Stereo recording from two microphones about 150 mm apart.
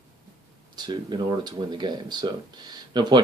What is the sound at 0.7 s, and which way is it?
Speech, 30° right (ahead or behind).